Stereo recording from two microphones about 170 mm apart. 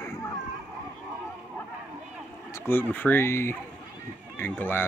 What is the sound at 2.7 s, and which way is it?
Speech, 10° left (ahead or behind).